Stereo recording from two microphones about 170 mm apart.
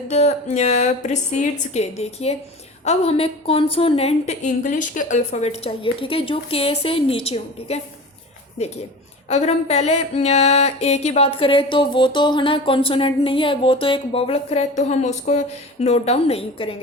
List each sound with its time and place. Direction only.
0.1 s a woman's voice: 45° left (ahead or behind)